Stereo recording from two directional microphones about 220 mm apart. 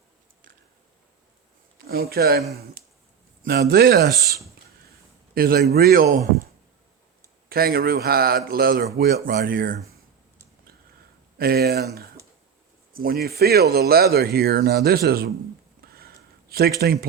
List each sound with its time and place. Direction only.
1.9 s speech: 45° right (ahead or behind)
3.4 s speech: 45° right (ahead or behind)
5.3 s a man's voice: 45° right (ahead or behind)
7.5 s speech: 45° right (ahead or behind)
11.3 s speech: 45° right (ahead or behind)
12.9 s speech: 40° right (ahead or behind)
15.9 s a sound: 45° right (ahead or behind)
16.8 s speech: 45° right (ahead or behind)